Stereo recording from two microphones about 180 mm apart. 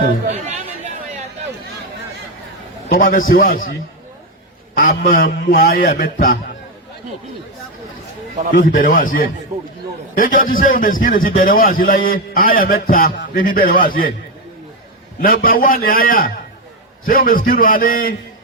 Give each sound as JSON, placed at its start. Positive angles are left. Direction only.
{"t": 2.9, "sound": "a man's voice", "side_deg": 55}
{"t": 4.8, "sound": "a man's voice", "side_deg": 50}
{"t": 8.5, "sound": "a man's voice", "side_deg": 50}
{"t": 15.2, "sound": "a man's voice", "side_deg": 55}